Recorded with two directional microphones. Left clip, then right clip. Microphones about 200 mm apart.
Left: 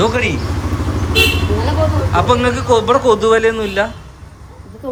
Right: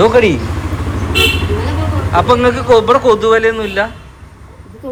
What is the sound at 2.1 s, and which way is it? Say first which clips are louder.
A man's voice: right 5 dB; 15° left (ahead or behind).